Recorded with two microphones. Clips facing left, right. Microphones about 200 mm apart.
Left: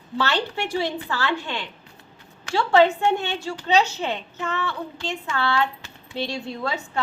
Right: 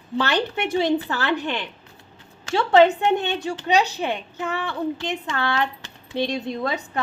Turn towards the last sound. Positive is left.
turn(degrees=-20)  # may be behind; listen again after turning